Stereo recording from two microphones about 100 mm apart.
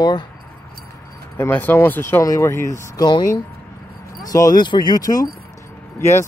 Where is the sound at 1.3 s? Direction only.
20° left (ahead or behind).